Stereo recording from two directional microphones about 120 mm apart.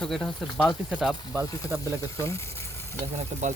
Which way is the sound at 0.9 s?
10° right (ahead or behind).